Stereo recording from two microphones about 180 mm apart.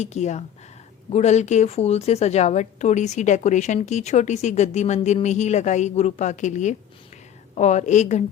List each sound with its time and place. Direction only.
0.0 s a woman's voice: 40° left (ahead or behind)